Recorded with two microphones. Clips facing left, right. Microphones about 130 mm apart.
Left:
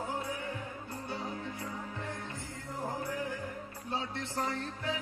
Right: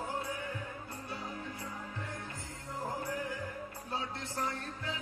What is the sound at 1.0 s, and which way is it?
Music, 25° left (ahead or behind).